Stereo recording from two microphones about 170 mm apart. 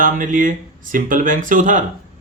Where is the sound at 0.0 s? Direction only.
50° right (ahead or behind).